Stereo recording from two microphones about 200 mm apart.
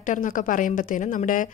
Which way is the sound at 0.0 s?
40° left (ahead or behind).